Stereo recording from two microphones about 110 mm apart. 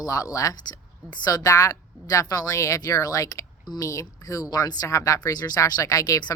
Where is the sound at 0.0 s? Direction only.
35° left (ahead or behind).